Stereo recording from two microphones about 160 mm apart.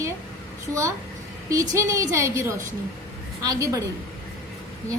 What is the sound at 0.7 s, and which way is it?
A woman's voice, 20° right (ahead or behind).